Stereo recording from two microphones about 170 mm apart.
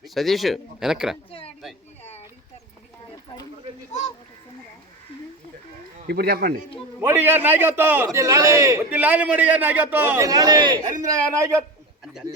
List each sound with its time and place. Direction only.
0.0 s speech: centre (ahead or behind)
6.1 s speech: 65° right (ahead or behind)
7.0 s a man's voice: 10° right (ahead or behind)